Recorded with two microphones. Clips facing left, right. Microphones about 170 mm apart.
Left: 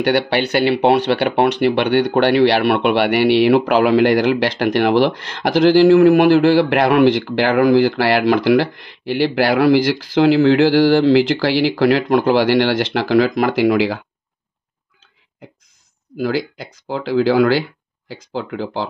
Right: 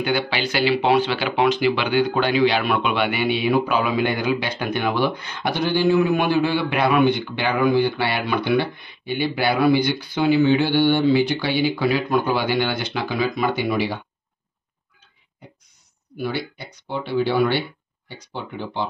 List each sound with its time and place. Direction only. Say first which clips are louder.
0.3 s speech: left 5 dB; 65° left (ahead or behind); by 14.0 s 90° left
16.2 s speech: left 7 dB; 90° left